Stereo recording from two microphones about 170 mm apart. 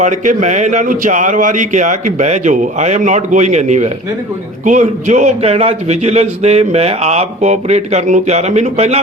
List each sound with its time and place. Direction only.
0.0 s a man's voice: 50° right (ahead or behind)